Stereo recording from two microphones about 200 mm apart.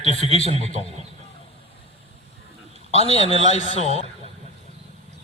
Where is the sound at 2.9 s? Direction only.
30° left (ahead or behind).